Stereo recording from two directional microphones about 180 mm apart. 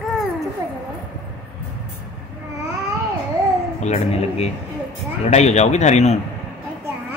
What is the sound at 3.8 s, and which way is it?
A man's voice, 40° left (ahead or behind).